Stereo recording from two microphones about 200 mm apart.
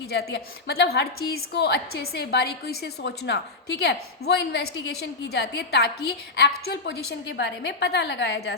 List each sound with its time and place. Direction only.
0.1 s a woman's voice: 55° left (ahead or behind)